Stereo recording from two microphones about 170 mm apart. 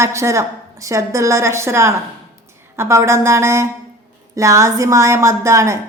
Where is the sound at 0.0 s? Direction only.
15° right (ahead or behind).